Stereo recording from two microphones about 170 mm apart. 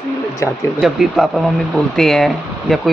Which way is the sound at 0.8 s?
Centre (ahead or behind).